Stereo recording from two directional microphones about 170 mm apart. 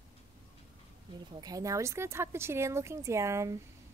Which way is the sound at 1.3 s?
20° right (ahead or behind).